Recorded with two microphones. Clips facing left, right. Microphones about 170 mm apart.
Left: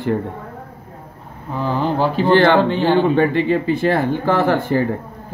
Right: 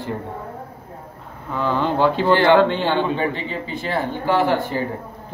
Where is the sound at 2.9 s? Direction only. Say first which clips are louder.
Left 6 dB; 50° left (ahead or behind).